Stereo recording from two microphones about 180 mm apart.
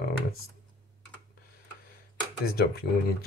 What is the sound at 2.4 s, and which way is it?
Speech, 60° left (ahead or behind).